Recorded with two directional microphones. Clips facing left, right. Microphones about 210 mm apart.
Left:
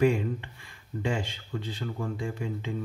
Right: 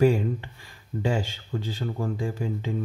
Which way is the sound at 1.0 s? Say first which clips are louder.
Right 3 dB; 40° right (ahead or behind).